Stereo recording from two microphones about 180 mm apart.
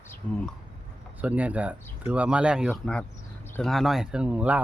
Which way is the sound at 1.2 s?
10° right (ahead or behind).